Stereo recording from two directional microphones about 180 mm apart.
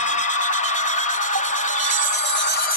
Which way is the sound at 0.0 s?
40° left (ahead or behind).